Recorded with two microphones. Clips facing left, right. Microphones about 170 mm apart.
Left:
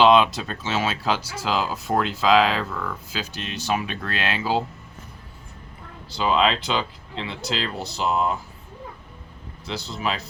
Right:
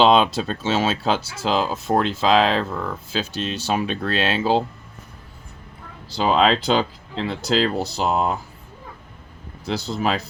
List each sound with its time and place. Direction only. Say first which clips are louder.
0.0 s speech: right 1 dB; 25° right (ahead or behind)
6.1 s speech: right 3 dB; 35° right (ahead or behind)
9.6 s speech: right 5 dB; 40° right (ahead or behind)